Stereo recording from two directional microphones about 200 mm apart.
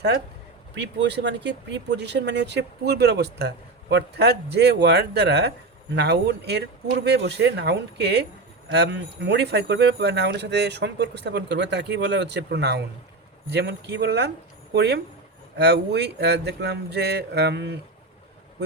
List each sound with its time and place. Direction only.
0.8 s speech: 60° right (ahead or behind)